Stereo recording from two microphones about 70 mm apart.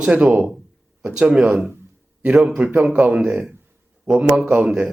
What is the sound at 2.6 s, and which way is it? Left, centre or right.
Speech, right.